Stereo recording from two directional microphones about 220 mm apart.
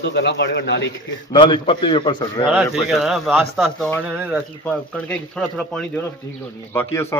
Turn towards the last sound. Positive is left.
turn(degrees=10)  # may be behind; listen again after turning